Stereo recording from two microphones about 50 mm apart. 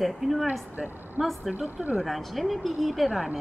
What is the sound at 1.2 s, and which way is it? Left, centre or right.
Speech, centre.